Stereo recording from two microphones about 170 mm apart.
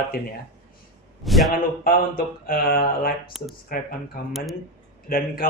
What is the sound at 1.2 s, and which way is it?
Speech, centre (ahead or behind).